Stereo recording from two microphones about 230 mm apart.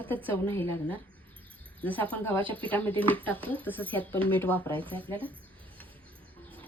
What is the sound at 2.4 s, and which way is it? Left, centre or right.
Speech, right.